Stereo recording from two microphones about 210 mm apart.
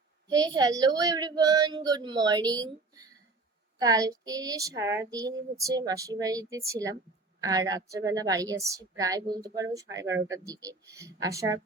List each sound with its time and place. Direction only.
0.3 s speech: 20° right (ahead or behind)